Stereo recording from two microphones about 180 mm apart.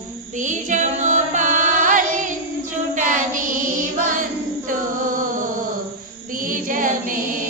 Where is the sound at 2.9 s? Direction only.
45° right (ahead or behind).